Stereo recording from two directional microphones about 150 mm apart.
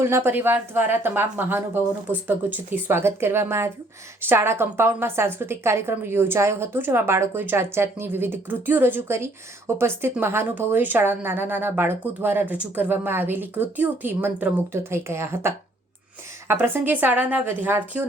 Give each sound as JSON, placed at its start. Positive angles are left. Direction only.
{"t": 0.0, "sound": "a woman's voice", "side_deg": -15}